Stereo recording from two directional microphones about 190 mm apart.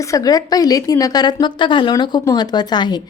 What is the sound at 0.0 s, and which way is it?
A woman's voice, 15° left (ahead or behind).